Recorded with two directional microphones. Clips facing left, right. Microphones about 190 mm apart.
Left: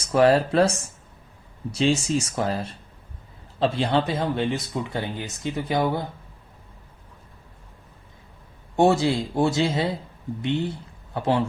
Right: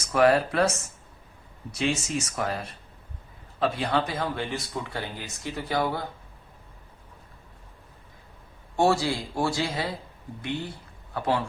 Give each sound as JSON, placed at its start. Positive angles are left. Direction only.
{"t": 0.1, "sound": "speech", "side_deg": 30}
{"t": 1.7, "sound": "speech", "side_deg": 30}
{"t": 8.7, "sound": "speech", "side_deg": 20}